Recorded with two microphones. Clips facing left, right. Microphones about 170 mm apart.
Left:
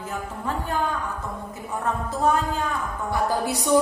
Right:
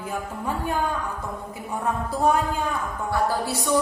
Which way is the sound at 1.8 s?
10° right (ahead or behind).